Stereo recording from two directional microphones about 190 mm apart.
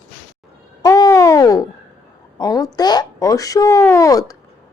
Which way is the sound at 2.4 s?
20° left (ahead or behind).